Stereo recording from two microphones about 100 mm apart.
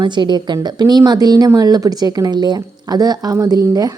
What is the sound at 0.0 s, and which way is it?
A woman's voice, 50° right (ahead or behind).